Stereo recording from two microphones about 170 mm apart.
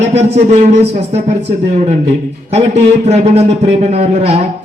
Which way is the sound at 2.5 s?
40° right (ahead or behind).